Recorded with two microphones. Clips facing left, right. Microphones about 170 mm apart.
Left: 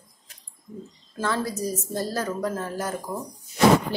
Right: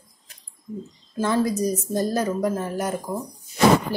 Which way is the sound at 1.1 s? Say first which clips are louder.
Right 5 dB; 15° right (ahead or behind).